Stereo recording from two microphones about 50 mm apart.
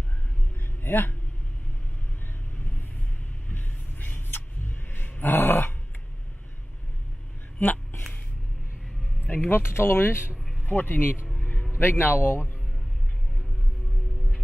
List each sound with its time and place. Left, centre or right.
0.8 s speech: left
3.5 s a sound: left
5.4 s dog: left
7.5 s a sound: left
9.5 s speech: left
10.6 s speech: left